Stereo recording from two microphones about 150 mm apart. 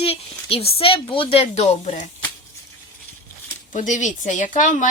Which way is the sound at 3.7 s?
55° left (ahead or behind).